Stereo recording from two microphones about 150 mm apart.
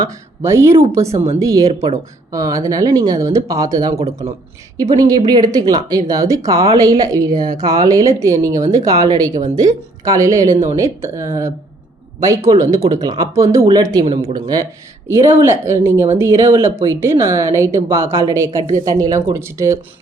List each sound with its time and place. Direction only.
0.0 s speech: 20° right (ahead or behind)